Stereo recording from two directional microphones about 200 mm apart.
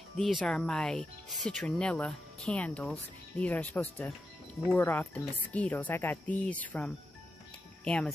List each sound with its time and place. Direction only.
0.2 s speech: centre (ahead or behind)